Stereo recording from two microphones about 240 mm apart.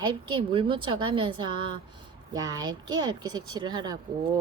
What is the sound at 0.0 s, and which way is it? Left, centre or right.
A woman's voice, right.